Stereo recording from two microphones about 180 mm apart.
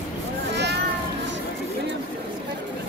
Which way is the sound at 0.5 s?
70° right (ahead or behind).